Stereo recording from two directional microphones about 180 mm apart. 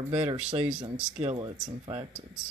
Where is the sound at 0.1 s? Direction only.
30° right (ahead or behind).